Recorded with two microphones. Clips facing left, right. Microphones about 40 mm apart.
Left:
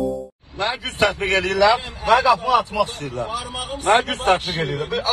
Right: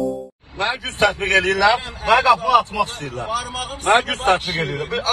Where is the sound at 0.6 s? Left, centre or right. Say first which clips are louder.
Right 1 dB; right.